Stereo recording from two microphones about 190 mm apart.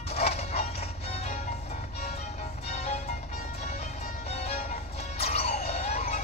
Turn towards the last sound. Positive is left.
turn(degrees=35)  # may be behind; listen again after turning